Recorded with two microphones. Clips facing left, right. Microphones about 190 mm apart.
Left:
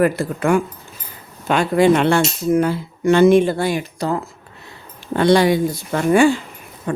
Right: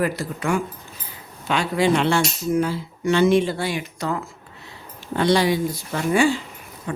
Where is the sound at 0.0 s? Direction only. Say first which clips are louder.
Left 6 dB; 55° left (ahead or behind).